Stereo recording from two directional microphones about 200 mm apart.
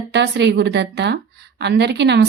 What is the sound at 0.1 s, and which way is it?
Speech, 60° right (ahead or behind).